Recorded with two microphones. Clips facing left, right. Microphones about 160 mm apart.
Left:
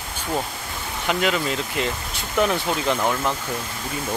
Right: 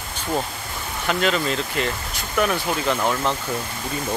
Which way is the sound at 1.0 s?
10° left (ahead or behind).